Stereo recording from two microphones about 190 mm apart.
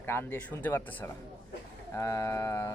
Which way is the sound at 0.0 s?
10° left (ahead or behind).